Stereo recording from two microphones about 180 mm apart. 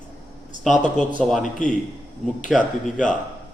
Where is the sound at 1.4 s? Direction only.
45° left (ahead or behind).